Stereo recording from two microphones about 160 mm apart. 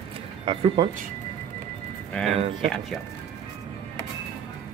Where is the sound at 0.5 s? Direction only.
35° right (ahead or behind).